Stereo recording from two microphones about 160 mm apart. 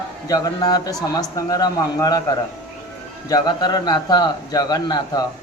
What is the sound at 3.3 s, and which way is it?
Speech, 25° left (ahead or behind).